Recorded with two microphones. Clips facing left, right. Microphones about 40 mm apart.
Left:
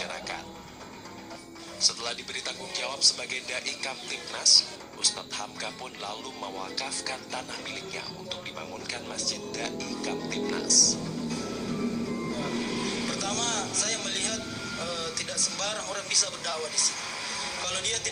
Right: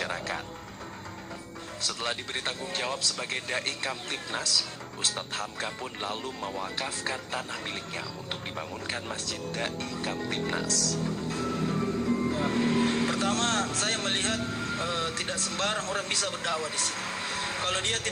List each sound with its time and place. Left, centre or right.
0.0 s music: right
1.8 s speech: right
11.8 s music: right
12.3 s speech: right